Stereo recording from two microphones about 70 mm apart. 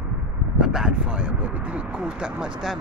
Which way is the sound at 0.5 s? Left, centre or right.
Centre.